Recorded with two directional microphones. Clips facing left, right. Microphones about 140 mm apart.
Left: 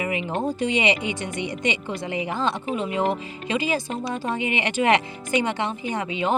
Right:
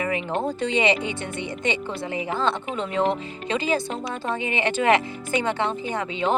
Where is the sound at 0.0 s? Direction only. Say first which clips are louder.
Right 1 dB; 15° left (ahead or behind).